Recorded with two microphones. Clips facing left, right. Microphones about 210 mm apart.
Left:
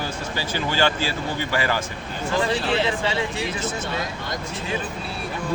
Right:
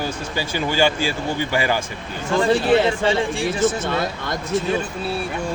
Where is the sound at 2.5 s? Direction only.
50° right (ahead or behind).